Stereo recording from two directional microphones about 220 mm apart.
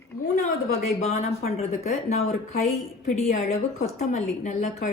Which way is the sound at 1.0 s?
30° left (ahead or behind).